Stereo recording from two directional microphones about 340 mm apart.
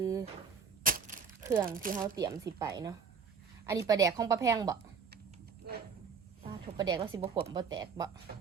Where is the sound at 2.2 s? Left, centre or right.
Centre.